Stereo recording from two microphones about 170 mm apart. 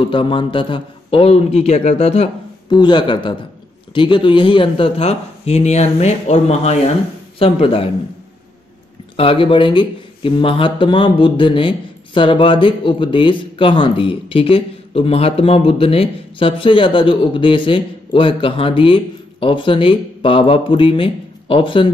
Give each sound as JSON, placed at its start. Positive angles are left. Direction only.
{"t": 0.0, "sound": "speech", "side_deg": 30}
{"t": 2.7, "sound": "speech", "side_deg": 25}
{"t": 9.1, "sound": "speech", "side_deg": 35}